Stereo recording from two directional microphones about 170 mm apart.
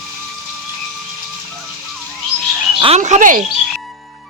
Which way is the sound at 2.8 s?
35° right (ahead or behind).